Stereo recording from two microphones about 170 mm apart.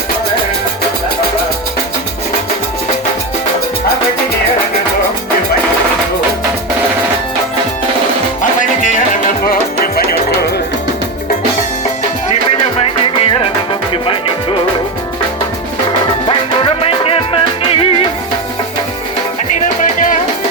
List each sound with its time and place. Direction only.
8.4 s music: 50° left (ahead or behind)
9.5 s music: 60° left (ahead or behind)
13.9 s music: 30° left (ahead or behind)
15.9 s music: 30° left (ahead or behind)
19.8 s music: 50° left (ahead or behind)